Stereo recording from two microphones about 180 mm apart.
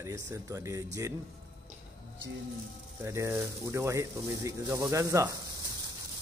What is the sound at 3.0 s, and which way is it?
Speech, 15° right (ahead or behind).